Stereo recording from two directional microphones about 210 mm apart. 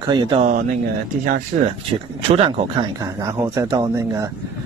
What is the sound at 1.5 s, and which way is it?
Speech, 40° right (ahead or behind).